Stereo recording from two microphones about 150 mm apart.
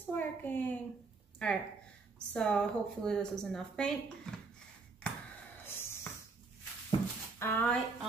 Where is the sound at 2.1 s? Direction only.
5° left (ahead or behind).